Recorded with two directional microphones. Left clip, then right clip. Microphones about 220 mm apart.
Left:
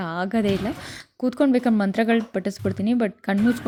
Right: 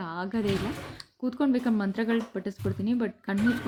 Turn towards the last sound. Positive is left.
turn(degrees=40)  # may be behind; listen again after turning